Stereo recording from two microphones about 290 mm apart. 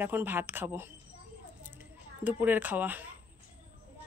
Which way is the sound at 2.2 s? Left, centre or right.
Centre.